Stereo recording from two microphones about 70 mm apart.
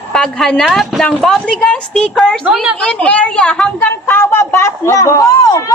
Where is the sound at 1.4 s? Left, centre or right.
Centre.